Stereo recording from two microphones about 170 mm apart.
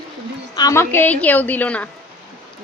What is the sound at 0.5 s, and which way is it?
A woman's voice, 20° left (ahead or behind).